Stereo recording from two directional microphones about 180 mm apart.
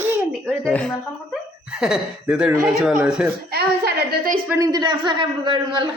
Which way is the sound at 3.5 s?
60° right (ahead or behind).